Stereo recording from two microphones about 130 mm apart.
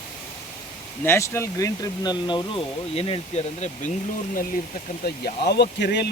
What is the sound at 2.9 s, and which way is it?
Speech, 50° left (ahead or behind).